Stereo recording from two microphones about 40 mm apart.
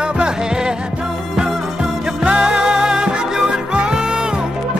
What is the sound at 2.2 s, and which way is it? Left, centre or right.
Music, right.